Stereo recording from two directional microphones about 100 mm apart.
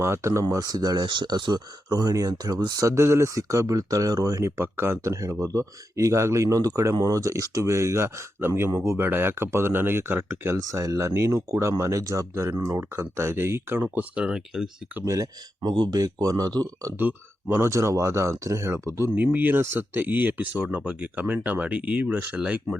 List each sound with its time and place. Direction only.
0.0 s speech: 30° right (ahead or behind)
0.5 s speech: 40° right (ahead or behind); by 10.6 s 25° right (ahead or behind)
10.6 s speech: 35° right (ahead or behind)
14.2 s speech: 5° right (ahead or behind)
15.0 s speech: 35° right (ahead or behind)
17.0 s speech: 20° right (ahead or behind)